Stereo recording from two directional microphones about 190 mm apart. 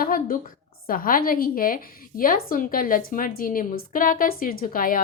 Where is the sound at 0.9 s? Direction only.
50° left (ahead or behind).